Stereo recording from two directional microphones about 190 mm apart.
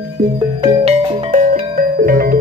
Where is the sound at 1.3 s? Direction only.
45° right (ahead or behind).